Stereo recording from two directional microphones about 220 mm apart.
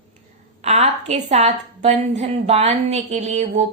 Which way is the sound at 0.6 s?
30° right (ahead or behind).